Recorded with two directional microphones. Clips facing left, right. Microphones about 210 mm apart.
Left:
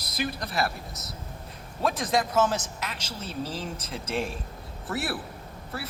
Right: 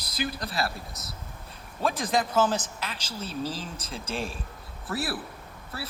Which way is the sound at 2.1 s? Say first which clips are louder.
Even; 30° right (ahead or behind).